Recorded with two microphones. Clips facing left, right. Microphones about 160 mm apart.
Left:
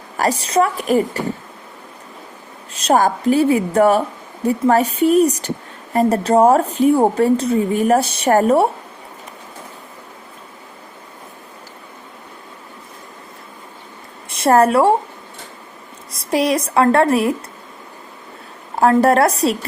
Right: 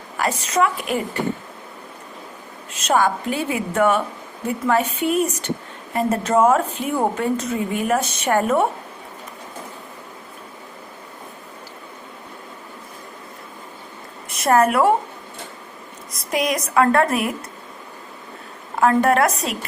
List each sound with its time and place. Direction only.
0.2 s speech: 35° left (ahead or behind)
2.7 s speech: 35° left (ahead or behind)
14.3 s a woman's voice: 30° left (ahead or behind)
16.1 s a woman's voice: 30° left (ahead or behind)
18.8 s speech: 35° left (ahead or behind)